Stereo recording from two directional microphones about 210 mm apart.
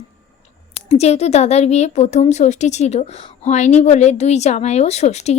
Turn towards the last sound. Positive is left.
turn(degrees=30)  # may be behind; listen again after turning